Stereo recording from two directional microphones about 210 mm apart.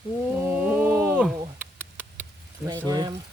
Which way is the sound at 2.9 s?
20° right (ahead or behind).